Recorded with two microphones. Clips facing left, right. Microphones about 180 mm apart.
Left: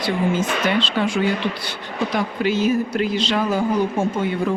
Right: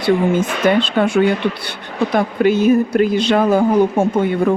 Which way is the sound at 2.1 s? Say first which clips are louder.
Right 7 dB; 55° right (ahead or behind).